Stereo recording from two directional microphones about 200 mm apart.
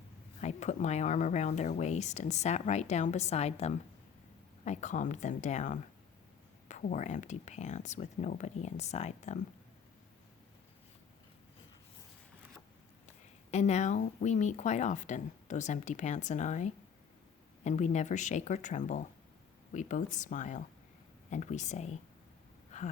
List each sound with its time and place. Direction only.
0.4 s speech: 35° left (ahead or behind)
13.5 s speech: 35° left (ahead or behind)